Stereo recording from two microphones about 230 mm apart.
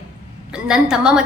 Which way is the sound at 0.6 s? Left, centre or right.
Centre.